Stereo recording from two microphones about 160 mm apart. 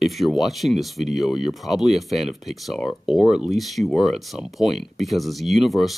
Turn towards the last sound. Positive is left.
turn(degrees=0)  # may be behind; listen again after turning